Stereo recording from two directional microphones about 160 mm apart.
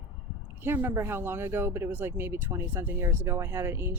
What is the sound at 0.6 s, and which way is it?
Speech, 15° right (ahead or behind).